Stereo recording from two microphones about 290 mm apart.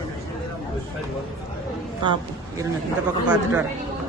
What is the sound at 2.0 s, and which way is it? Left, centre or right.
Speech, centre.